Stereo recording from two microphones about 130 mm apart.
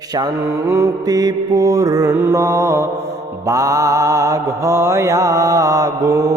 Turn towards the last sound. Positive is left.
turn(degrees=-25)  # may be behind; listen again after turning